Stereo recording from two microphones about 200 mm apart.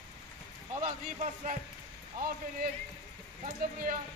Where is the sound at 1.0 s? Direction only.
35° right (ahead or behind).